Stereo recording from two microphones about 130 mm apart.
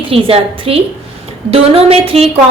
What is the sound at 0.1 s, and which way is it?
A woman's voice, 45° right (ahead or behind).